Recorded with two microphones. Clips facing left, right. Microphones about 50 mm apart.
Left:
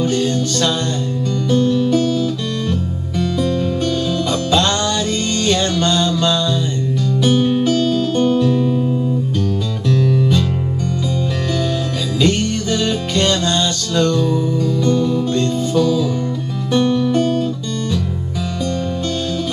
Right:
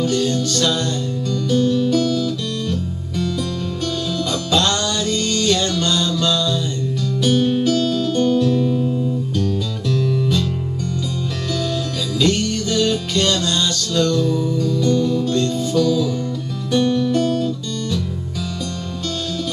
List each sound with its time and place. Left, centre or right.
0.0 s music: left
12.2 s music: left